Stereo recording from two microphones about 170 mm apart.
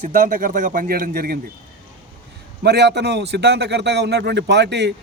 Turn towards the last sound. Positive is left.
turn(degrees=-90)